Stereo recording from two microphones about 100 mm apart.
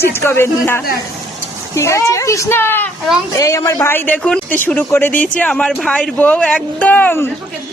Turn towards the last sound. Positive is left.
turn(degrees=20)  # may be behind; listen again after turning